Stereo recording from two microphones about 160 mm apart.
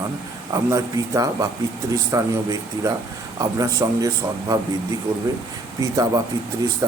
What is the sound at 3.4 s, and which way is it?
Speech, 20° right (ahead or behind).